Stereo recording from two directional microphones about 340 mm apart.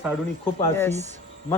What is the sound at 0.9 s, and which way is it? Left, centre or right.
Speech, centre.